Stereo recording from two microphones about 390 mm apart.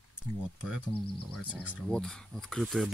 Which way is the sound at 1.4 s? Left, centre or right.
Centre.